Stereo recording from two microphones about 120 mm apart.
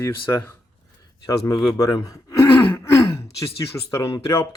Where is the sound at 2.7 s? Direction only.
25° left (ahead or behind).